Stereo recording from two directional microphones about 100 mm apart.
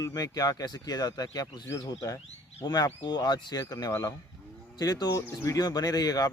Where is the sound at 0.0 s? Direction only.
40° left (ahead or behind).